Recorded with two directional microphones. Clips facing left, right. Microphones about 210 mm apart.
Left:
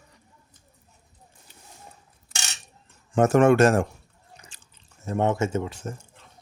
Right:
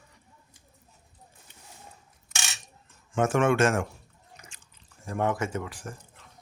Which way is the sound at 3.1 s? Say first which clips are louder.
Left 6 dB; 40° left (ahead or behind).